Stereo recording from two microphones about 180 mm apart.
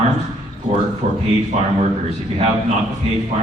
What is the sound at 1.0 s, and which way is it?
Speech, 35° right (ahead or behind).